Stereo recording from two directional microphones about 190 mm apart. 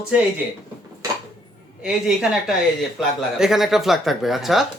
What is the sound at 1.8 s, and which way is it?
Speech, 5° right (ahead or behind).